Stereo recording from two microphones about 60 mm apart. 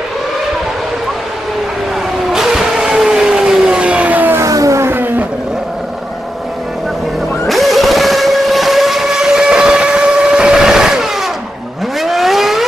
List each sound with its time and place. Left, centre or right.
2.3 s vehicle: centre
3.1 s a sound: centre; by 4.4 s right
4.5 s vehicle: right
4.8 s vehicle: right
7.4 s vehicle: centre